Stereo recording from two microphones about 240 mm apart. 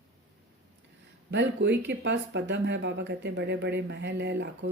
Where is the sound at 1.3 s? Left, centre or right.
Right.